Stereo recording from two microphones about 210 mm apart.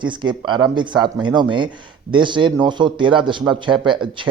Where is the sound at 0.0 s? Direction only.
20° right (ahead or behind).